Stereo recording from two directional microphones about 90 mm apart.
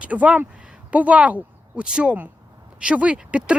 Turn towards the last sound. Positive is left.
turn(degrees=-15)  # may be behind; listen again after turning